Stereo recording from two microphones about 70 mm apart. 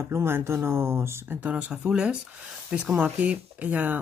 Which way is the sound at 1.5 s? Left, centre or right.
Centre.